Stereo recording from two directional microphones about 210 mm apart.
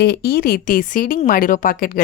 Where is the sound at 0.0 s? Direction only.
45° left (ahead or behind).